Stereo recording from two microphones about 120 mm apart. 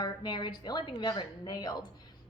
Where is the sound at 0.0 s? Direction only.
40° left (ahead or behind).